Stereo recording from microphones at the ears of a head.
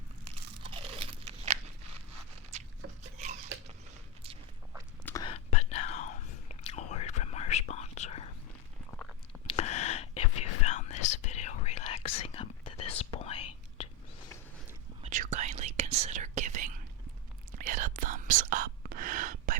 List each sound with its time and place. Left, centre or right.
0.3 s crunch: right
2.5 s a sound: right
5.1 s whispering: left
9.5 s whispering: left
15.0 s whispering: right